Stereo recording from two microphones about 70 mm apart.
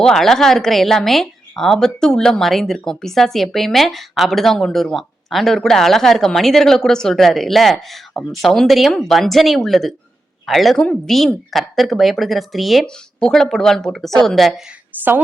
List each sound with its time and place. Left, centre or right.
0.0 s a woman's voice: centre
12.8 s a woman's voice: centre
14.9 s a woman's voice: right